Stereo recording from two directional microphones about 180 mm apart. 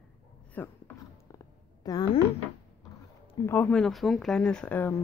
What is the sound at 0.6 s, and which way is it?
Speech, 10° left (ahead or behind).